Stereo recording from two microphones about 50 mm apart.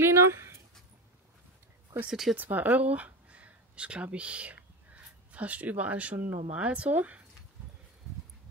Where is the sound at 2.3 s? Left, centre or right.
Right.